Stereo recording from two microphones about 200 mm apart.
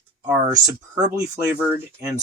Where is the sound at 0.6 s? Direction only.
20° right (ahead or behind).